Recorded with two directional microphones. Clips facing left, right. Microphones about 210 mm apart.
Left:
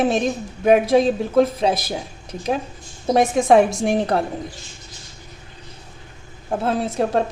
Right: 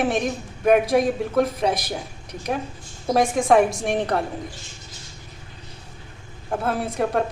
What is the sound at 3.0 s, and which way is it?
A woman's voice, 25° left (ahead or behind).